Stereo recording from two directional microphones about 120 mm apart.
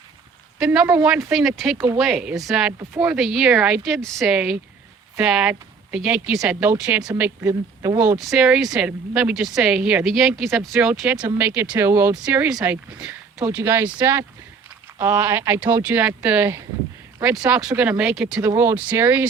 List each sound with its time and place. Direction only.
0.6 s speech: 5° right (ahead or behind)
7.2 s speech: 20° right (ahead or behind)
8.2 s speech: 5° right (ahead or behind)
18.4 s speech: 20° right (ahead or behind)